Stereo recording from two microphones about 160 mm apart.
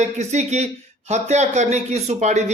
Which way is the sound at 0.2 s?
45° right (ahead or behind).